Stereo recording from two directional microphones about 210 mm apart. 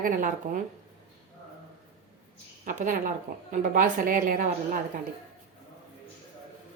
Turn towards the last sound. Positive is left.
turn(degrees=-40)  # may be behind; listen again after turning